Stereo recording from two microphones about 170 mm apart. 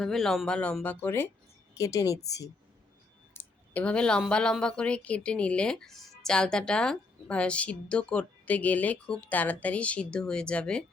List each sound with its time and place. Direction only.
0.0 s a woman's voice: centre (ahead or behind); by 2.5 s 20° left (ahead or behind)
3.3 s a woman's voice: 10° left (ahead or behind)